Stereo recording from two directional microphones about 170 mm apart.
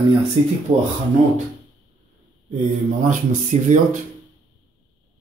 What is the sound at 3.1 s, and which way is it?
Speech, 50° right (ahead or behind).